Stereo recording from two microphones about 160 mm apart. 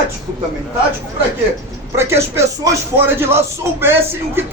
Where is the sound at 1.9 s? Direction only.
15° right (ahead or behind).